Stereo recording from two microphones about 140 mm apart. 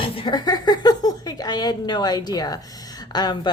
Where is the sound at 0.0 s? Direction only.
35° left (ahead or behind).